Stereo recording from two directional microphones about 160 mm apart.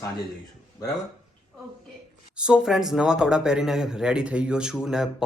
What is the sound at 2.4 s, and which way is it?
A man's voice, 5° right (ahead or behind).